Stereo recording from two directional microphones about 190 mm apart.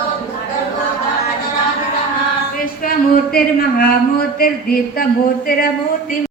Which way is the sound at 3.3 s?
50° left (ahead or behind).